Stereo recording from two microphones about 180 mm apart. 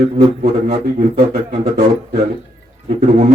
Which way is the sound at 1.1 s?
50° right (ahead or behind).